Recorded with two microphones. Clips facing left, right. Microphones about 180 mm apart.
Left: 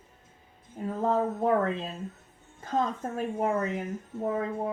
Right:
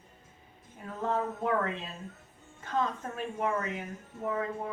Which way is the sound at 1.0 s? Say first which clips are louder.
Left 5 dB; 35° left (ahead or behind).